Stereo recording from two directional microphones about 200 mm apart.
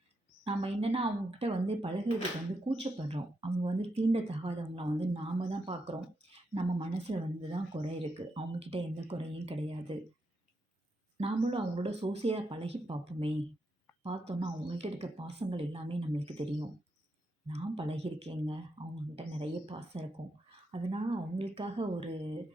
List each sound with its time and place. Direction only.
0.4 s speech: 30° right (ahead or behind)
11.2 s speech: 30° right (ahead or behind)